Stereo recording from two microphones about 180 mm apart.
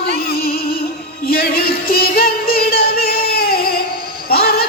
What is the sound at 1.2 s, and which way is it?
Music, 55° left (ahead or behind).